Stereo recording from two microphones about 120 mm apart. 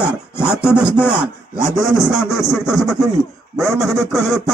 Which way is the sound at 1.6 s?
25° left (ahead or behind).